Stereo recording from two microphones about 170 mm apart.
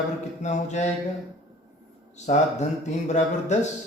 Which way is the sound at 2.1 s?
45° left (ahead or behind).